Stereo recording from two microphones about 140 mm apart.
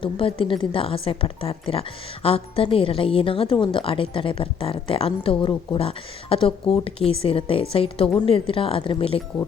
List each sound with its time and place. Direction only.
0.0 s a woman's voice: 40° left (ahead or behind)